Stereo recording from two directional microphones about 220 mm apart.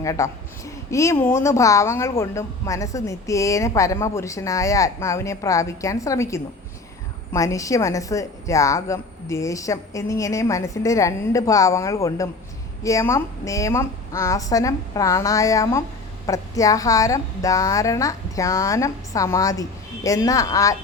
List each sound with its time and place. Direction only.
0.0 s a woman's voice: 15° left (ahead or behind)